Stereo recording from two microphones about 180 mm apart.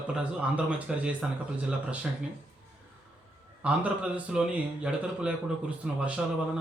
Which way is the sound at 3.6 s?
5° right (ahead or behind).